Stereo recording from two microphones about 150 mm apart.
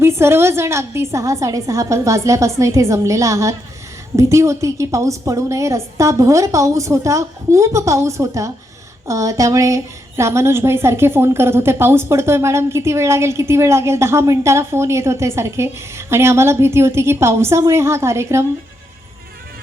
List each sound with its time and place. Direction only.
0.0 s a woman's voice: 15° right (ahead or behind)